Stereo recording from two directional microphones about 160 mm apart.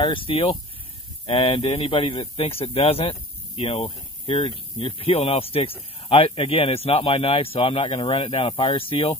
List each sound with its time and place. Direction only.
0.0 s speech: 35° left (ahead or behind)